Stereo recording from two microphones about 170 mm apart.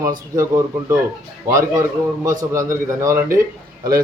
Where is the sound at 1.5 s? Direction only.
20° right (ahead or behind).